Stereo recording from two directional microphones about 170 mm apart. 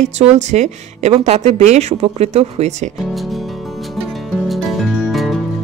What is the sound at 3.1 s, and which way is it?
Music, centre (ahead or behind).